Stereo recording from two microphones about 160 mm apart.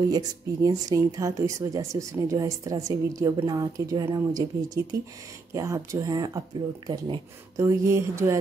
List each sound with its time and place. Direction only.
0.1 s speech: 25° right (ahead or behind)
7.6 s speech: 15° right (ahead or behind)